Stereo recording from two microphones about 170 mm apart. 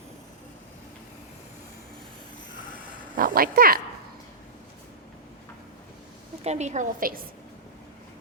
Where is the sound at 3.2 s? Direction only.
55° right (ahead or behind).